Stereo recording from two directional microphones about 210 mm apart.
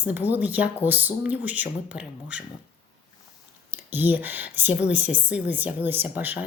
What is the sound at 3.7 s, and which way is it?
Speech, 10° right (ahead or behind).